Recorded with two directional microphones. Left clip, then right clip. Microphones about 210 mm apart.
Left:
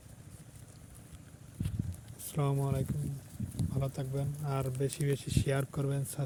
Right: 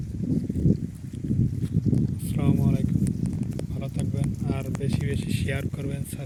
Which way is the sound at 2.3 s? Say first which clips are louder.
Right 7 dB; 10° left (ahead or behind).